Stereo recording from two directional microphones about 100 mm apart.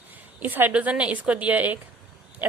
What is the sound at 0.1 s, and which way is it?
A woman's voice, 20° right (ahead or behind).